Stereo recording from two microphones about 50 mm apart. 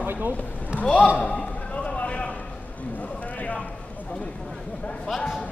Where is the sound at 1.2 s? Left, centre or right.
Left.